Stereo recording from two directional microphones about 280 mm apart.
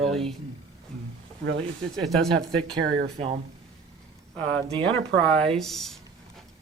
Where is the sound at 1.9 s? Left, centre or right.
Centre.